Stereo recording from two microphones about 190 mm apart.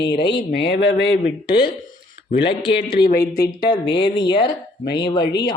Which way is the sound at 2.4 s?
25° left (ahead or behind).